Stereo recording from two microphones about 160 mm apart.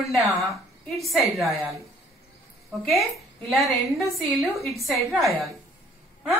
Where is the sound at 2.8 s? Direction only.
Centre (ahead or behind).